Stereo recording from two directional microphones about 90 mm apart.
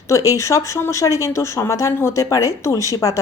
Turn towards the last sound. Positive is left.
turn(degrees=35)  # may be behind; listen again after turning